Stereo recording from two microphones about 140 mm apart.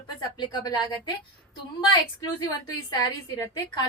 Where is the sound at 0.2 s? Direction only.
30° left (ahead or behind).